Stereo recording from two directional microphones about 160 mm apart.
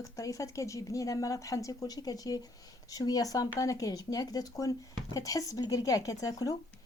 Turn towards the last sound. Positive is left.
turn(degrees=20)  # may be behind; listen again after turning